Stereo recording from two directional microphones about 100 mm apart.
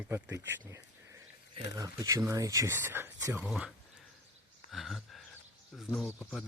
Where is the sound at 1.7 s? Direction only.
35° right (ahead or behind).